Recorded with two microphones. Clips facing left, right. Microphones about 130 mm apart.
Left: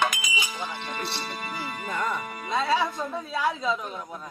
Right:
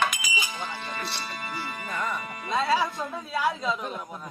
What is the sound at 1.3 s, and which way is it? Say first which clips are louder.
Music: left 1 dB; 20° left (ahead or behind).